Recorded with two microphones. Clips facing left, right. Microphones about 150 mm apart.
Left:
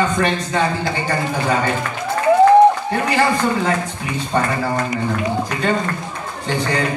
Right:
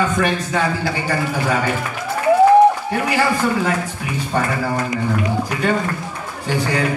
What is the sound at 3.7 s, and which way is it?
Speech, 10° right (ahead or behind).